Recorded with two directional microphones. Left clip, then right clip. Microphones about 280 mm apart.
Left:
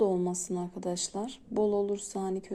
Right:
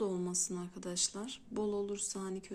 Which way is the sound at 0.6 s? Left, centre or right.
Right.